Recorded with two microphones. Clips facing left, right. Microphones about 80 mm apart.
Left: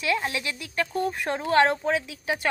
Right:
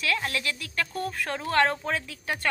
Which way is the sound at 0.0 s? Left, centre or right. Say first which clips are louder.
Left 2 dB; centre.